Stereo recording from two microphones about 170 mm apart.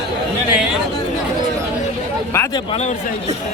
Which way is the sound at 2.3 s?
15° left (ahead or behind).